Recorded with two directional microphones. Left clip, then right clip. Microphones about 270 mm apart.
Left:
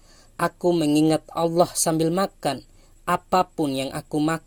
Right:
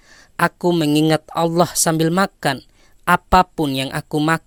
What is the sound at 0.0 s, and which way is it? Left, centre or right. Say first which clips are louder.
A man's voice: right 6 dB; right.